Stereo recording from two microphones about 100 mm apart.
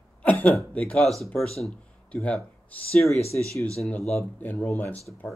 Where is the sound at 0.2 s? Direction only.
15° left (ahead or behind).